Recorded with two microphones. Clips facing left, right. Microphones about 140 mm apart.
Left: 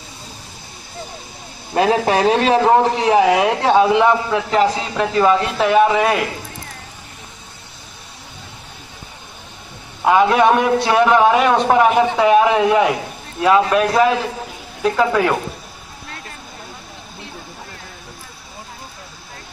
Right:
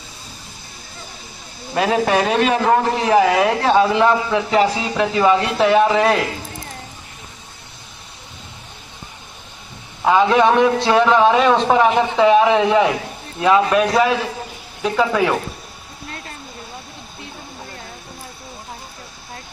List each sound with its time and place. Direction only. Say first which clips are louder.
1.9 s a man's voice: left 1 dB; 30° left (ahead or behind)
4.3 s a man's voice: even; centre (ahead or behind)
10.0 s a man's voice: left 1 dB; 5° left (ahead or behind)